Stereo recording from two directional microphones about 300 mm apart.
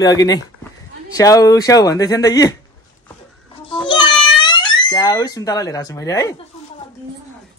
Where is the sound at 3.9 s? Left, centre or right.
Centre.